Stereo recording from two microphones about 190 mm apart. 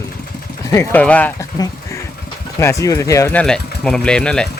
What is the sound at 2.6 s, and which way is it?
Speech, 15° left (ahead or behind).